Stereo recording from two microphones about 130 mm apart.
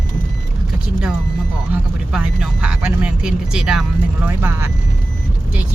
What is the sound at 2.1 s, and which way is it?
Speech, 5° right (ahead or behind).